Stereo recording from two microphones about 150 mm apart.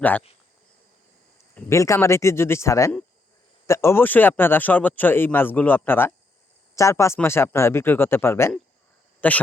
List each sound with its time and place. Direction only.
1.7 s speech: 20° left (ahead or behind)